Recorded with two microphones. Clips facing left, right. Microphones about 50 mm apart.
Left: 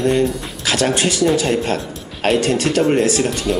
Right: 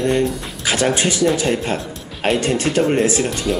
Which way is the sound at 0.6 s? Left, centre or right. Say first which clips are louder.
Even; centre.